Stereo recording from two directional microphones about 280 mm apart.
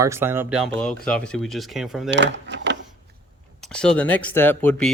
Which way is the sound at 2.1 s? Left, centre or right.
Right.